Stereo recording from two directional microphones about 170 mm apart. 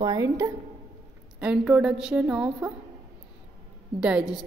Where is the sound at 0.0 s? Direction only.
20° right (ahead or behind).